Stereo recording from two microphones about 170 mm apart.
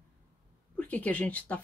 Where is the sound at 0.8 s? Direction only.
10° left (ahead or behind).